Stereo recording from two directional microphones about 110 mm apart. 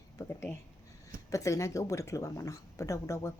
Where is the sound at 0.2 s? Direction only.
25° left (ahead or behind).